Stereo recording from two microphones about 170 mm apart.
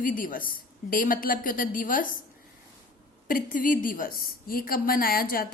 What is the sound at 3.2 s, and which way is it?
A woman's voice, 55° left (ahead or behind).